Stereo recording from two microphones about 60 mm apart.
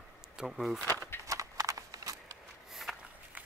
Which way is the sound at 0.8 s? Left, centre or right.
Left.